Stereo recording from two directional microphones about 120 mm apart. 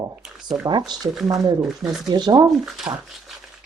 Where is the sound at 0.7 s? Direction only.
40° right (ahead or behind).